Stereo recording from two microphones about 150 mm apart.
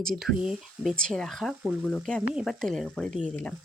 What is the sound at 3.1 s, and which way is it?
Speech, 55° right (ahead or behind).